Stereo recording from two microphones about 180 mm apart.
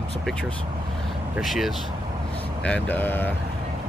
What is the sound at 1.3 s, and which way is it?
Speech, centre (ahead or behind).